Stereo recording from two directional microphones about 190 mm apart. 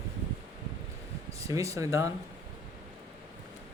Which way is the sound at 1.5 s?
15° right (ahead or behind).